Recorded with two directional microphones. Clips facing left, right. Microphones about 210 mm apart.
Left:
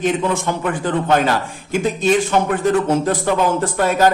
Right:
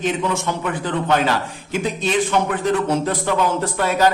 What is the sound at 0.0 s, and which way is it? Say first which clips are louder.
A man's voice: left 3 dB; 50° left (ahead or behind).